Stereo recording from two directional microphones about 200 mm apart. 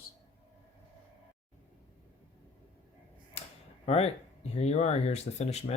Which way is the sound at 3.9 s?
30° left (ahead or behind).